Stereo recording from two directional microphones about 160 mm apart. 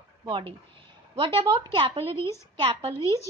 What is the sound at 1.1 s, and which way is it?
A woman's voice, 35° right (ahead or behind).